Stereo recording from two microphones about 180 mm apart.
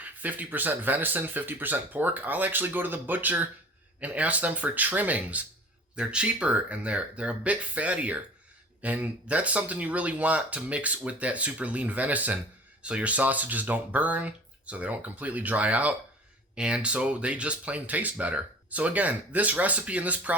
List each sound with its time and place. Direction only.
0.0 s speech: 10° right (ahead or behind)